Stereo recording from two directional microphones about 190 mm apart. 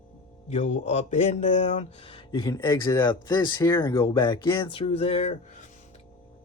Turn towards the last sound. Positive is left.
turn(degrees=35)  # may be behind; listen again after turning